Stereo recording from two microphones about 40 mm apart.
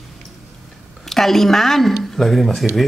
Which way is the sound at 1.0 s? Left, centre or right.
Centre.